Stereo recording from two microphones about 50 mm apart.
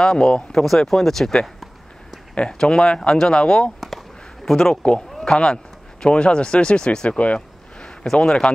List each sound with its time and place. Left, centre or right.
0.0 s speech: centre
2.3 s speech: centre
4.5 s speech: centre
7.1 s speech: left
7.8 s speech: centre